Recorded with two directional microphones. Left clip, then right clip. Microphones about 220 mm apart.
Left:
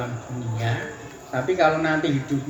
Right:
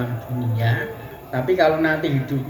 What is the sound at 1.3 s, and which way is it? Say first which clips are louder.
Speech: right 2 dB; 50° right (ahead or behind).